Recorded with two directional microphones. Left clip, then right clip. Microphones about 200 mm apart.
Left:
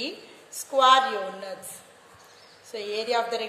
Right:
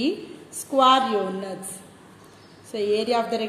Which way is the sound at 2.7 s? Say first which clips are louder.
Right 4 dB; 5° left (ahead or behind).